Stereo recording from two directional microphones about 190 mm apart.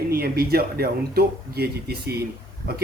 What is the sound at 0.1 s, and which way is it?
Speech, 55° right (ahead or behind).